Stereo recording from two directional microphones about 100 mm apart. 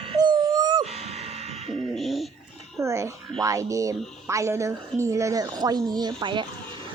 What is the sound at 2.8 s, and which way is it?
Frog, 30° right (ahead or behind).